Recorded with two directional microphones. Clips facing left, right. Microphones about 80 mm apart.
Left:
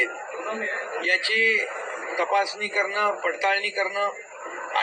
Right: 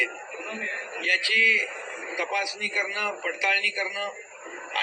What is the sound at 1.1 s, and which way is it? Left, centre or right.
A man's voice, left.